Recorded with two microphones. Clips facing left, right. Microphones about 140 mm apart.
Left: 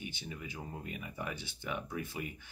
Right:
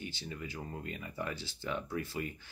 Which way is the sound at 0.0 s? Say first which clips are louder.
Right 2 dB; 15° left (ahead or behind).